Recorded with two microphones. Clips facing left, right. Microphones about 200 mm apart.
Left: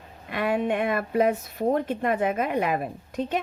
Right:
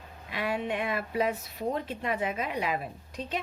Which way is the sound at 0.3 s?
55° left (ahead or behind).